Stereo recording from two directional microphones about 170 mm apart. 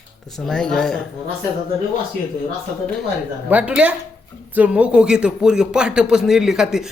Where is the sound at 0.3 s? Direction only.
5° left (ahead or behind).